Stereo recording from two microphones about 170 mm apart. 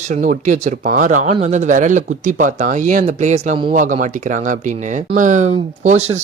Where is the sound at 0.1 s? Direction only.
45° right (ahead or behind).